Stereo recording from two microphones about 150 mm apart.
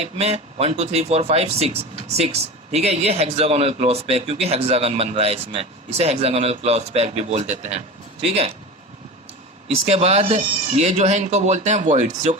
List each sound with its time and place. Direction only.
0.0 s speech: 45° right (ahead or behind)
9.6 s speech: 45° right (ahead or behind)